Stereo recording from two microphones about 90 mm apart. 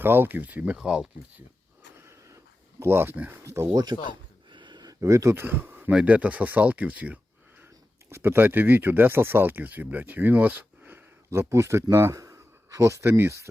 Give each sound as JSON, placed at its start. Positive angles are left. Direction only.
{"t": 0.0, "sound": "speech", "side_deg": -25}
{"t": 2.0, "sound": "a sound", "side_deg": -35}
{"t": 2.8, "sound": "speech", "side_deg": -25}
{"t": 3.9, "sound": "speech", "side_deg": -55}
{"t": 4.4, "sound": "a sound", "side_deg": -55}
{"t": 4.9, "sound": "speech", "side_deg": -35}
{"t": 8.1, "sound": "speech", "side_deg": -25}